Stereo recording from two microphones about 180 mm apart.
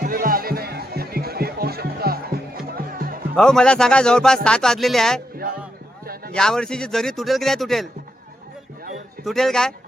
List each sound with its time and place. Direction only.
0.0 s music: 50° right (ahead or behind)
3.3 s a man's voice: 5° left (ahead or behind)
6.3 s a man's voice: 5° left (ahead or behind)
9.2 s a man's voice: centre (ahead or behind)